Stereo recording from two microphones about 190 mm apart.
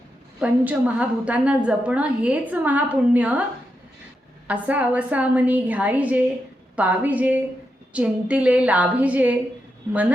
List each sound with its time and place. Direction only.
0.3 s a woman's voice: 5° right (ahead or behind)
4.4 s a woman's voice: 10° right (ahead or behind)